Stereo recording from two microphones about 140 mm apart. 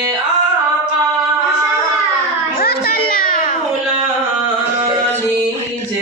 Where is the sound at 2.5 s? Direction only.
90° left.